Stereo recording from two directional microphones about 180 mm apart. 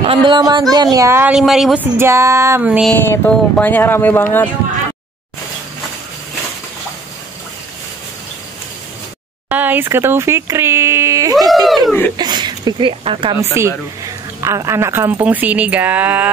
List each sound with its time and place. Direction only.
0.0 s speech: 30° right (ahead or behind); by 2.9 s 10° right (ahead or behind)
2.9 s speech: 5° left (ahead or behind)
9.5 s speech: 10° right (ahead or behind)
11.6 s speech: centre (ahead or behind)
12.2 s speech: 25° right (ahead or behind)
13.4 s speech: 15° right (ahead or behind)